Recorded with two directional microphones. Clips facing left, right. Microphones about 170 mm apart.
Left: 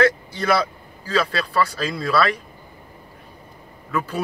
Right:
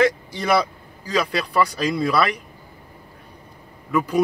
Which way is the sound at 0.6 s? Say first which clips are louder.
Right 2 dB; 15° right (ahead or behind).